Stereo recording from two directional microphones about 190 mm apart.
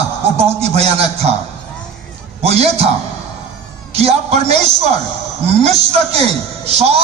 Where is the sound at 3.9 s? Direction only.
35° right (ahead or behind).